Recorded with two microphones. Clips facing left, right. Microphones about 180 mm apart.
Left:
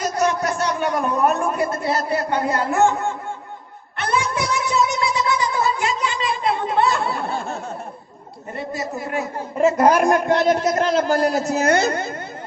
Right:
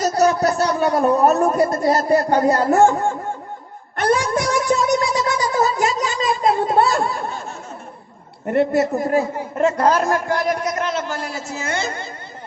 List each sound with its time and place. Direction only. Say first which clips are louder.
0.0 s speech: right 4 dB; 35° right (ahead or behind)
3.9 s a sound: right 4 dB; 45° right (ahead or behind)
8.4 s a woman's voice: right 11 dB; 65° right (ahead or behind)
9.6 s a man's voice: left 2 dB; 5° left (ahead or behind); by 11.9 s 40° left (ahead or behind)